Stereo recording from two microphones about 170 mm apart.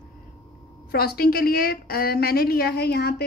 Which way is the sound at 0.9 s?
65° left (ahead or behind).